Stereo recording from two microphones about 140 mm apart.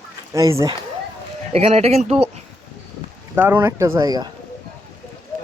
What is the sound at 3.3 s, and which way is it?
Speech, 15° right (ahead or behind).